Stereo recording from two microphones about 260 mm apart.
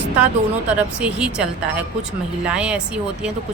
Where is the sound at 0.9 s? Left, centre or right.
Centre.